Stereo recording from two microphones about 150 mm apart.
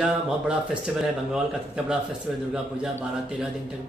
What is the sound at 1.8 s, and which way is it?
Speech, 5° right (ahead or behind).